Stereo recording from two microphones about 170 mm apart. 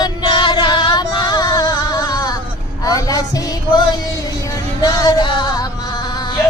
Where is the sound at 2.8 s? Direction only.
20° left (ahead or behind).